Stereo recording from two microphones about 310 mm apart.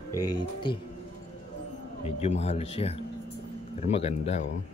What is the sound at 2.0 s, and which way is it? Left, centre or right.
A man's voice, left.